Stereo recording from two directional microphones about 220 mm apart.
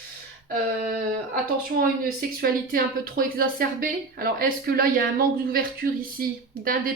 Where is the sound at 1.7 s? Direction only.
45° right (ahead or behind).